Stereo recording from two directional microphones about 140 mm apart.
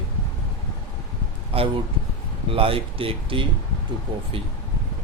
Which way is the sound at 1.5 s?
40° right (ahead or behind).